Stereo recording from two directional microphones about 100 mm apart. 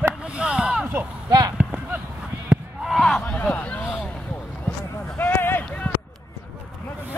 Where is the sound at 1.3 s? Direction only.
35° right (ahead or behind).